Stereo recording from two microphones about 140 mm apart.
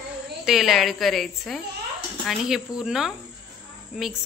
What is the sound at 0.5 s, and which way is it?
Speech, centre (ahead or behind).